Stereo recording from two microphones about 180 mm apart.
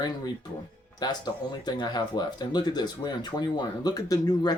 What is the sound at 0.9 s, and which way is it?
Speech, 25° left (ahead or behind).